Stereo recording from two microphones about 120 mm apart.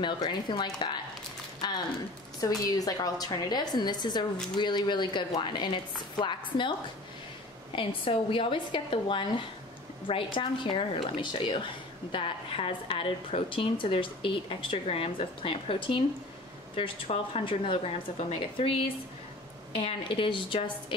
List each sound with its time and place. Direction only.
0.0 s a woman's voice: 40° left (ahead or behind)
7.7 s a woman's voice: 45° left (ahead or behind)
19.7 s a woman's voice: 50° left (ahead or behind)